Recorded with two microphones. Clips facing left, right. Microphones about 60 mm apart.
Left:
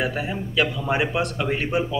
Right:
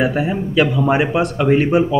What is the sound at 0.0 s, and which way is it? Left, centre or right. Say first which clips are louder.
A man's voice: right 8 dB; centre.